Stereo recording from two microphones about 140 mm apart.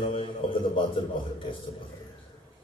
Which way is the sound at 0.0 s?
40° left (ahead or behind).